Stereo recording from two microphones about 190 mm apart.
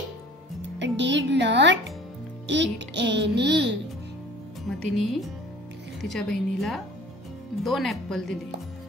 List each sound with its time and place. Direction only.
0.6 s music: 70° right (ahead or behind)
2.4 s a child's voice: 70° right (ahead or behind)
4.6 s a woman's voice: centre (ahead or behind)